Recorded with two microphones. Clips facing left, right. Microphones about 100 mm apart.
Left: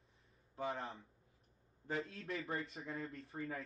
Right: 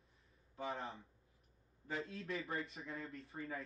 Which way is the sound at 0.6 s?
Centre (ahead or behind).